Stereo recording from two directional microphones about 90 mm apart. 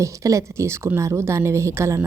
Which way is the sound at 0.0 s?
35° right (ahead or behind).